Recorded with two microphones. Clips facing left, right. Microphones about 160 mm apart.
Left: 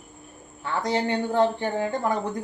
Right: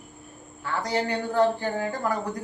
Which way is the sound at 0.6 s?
25° left (ahead or behind).